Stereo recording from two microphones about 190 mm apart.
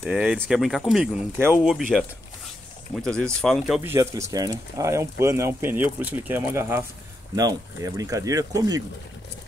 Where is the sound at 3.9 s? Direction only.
15° right (ahead or behind).